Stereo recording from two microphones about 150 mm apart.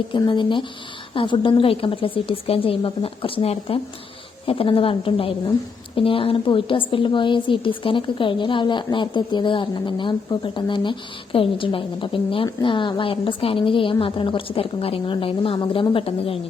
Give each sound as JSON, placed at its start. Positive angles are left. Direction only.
{"t": 0.1, "sound": "a woman's voice", "side_deg": 30}